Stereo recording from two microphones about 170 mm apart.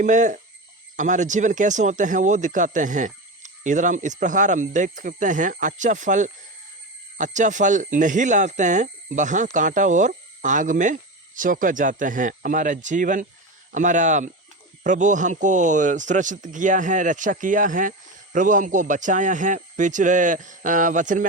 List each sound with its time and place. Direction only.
0.0 s speech: 45° right (ahead or behind)